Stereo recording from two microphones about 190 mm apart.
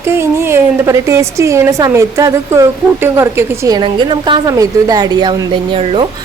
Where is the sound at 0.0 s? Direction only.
15° right (ahead or behind).